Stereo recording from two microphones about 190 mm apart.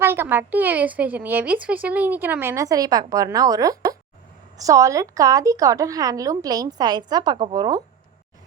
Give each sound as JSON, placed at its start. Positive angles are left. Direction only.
{"t": 0.0, "sound": "a woman's voice", "side_deg": -10}